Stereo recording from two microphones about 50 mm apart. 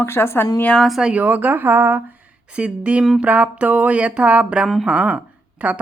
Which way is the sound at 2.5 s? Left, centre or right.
Right.